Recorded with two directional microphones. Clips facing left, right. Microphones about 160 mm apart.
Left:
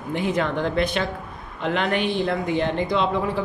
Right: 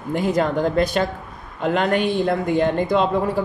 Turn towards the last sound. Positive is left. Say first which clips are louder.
# right 3 dB
turn(degrees=-45)  # may be behind; listen again after turning